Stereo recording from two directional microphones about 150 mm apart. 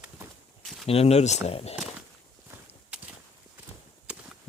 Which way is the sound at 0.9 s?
45° left (ahead or behind).